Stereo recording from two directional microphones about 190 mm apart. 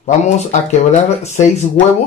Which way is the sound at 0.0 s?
40° left (ahead or behind).